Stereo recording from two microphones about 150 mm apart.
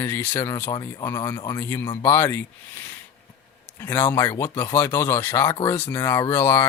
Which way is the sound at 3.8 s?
15° left (ahead or behind).